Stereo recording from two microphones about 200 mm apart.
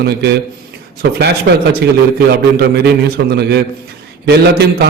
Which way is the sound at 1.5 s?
65° right (ahead or behind).